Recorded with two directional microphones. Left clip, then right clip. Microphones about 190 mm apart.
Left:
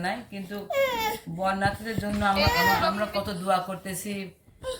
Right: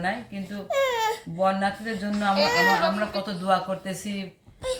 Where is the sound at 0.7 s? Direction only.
15° right (ahead or behind).